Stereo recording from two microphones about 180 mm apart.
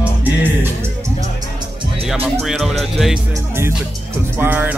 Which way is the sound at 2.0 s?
Centre (ahead or behind).